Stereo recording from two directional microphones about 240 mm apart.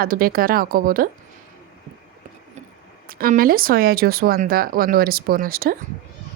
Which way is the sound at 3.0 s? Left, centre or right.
Right.